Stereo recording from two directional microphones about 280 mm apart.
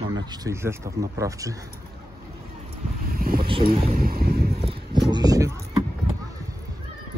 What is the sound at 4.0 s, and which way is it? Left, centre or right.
Vehicle, right.